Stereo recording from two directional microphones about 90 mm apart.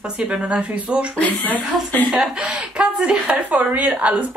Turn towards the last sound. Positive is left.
turn(degrees=-15)  # may be behind; listen again after turning